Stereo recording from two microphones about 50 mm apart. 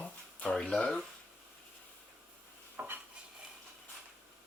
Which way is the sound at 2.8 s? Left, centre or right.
Right.